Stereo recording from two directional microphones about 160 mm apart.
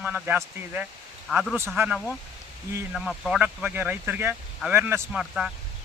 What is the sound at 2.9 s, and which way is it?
Speech, centre (ahead or behind).